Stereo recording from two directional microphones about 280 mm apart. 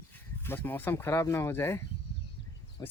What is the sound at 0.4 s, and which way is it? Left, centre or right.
Speech, centre.